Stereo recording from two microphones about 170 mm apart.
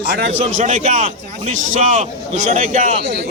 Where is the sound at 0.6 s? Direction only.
50° right (ahead or behind).